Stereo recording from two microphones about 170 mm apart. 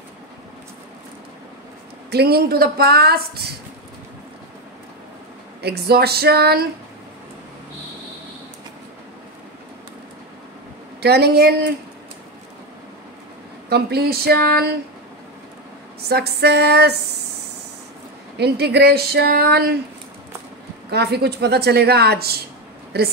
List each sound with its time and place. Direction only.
2.0 s a woman's voice: 70° right (ahead or behind)
5.6 s a woman's voice: 70° right (ahead or behind)
11.0 s a woman's voice: 70° right (ahead or behind)
13.7 s a woman's voice: 70° right (ahead or behind)
16.1 s a woman's voice: 75° right (ahead or behind)
18.4 s a woman's voice: 75° right (ahead or behind)
20.9 s a woman's voice: 75° right (ahead or behind)